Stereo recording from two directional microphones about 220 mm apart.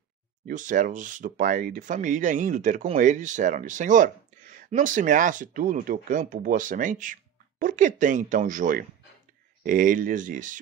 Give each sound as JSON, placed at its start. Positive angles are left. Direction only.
{"t": 0.5, "sound": "speech", "side_deg": -35}